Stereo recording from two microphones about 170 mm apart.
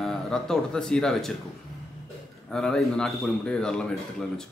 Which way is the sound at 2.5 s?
5° left (ahead or behind).